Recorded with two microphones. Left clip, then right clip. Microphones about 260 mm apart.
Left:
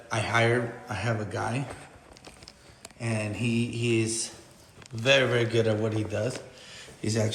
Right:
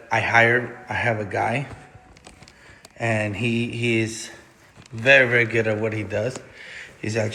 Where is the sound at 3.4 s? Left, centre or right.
Centre.